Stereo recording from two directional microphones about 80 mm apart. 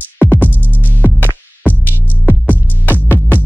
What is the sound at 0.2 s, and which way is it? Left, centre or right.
Music, left.